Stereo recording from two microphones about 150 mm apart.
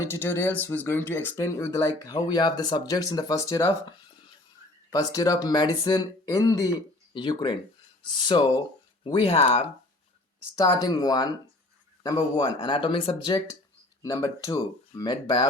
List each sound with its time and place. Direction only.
0.0 s speech: 15° left (ahead or behind); by 9.6 s 40° left (ahead or behind)
10.5 s speech: 25° left (ahead or behind)
14.0 s speech: 25° left (ahead or behind)